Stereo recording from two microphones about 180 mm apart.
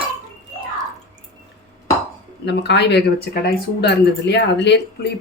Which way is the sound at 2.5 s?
70° left (ahead or behind).